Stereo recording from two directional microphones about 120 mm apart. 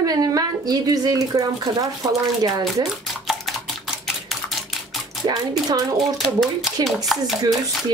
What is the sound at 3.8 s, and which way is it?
Typewriter, centre (ahead or behind).